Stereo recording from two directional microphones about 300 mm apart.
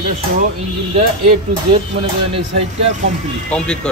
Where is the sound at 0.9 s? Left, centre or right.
Right.